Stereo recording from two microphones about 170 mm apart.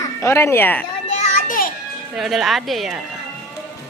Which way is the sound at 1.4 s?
55° left (ahead or behind).